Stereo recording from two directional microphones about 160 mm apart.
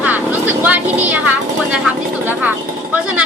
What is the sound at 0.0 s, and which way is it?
Vehicle, 10° right (ahead or behind).